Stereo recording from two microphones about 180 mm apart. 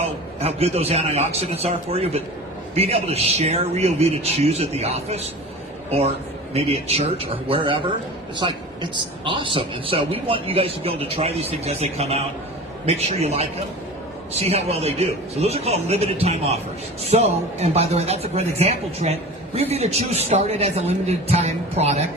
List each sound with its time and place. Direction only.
0.0 s a man's voice: 35° right (ahead or behind)
6.5 s a man's voice: 35° right (ahead or behind)